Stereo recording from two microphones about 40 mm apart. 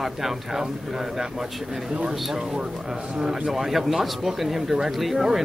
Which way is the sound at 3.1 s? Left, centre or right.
Centre.